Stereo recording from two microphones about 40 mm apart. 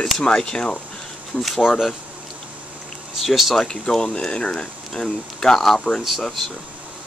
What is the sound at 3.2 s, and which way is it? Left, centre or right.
Speech, centre.